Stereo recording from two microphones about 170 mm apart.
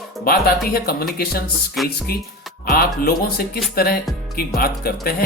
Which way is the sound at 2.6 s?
60° left (ahead or behind).